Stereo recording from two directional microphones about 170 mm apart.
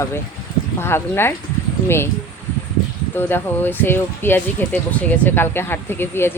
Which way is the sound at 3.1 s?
10° left (ahead or behind).